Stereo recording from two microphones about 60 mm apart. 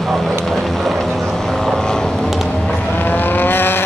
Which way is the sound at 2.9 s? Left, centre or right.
Left.